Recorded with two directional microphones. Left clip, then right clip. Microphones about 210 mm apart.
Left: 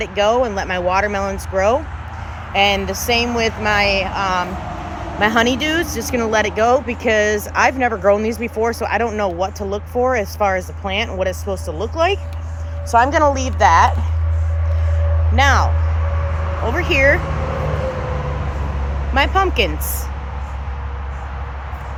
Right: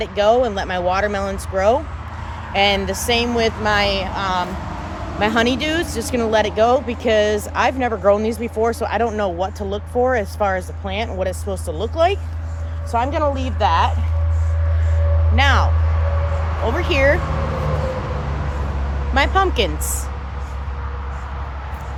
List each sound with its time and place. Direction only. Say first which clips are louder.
0.0 s a woman's voice: even; 5° left (ahead or behind)
13.6 s a woman's voice: left 5 dB; 15° left (ahead or behind)
15.4 s a woman's voice: left 2 dB; 15° left (ahead or behind)
16.6 s speech: left 2 dB; 5° right (ahead or behind)
19.1 s speech: left 1 dB; centre (ahead or behind)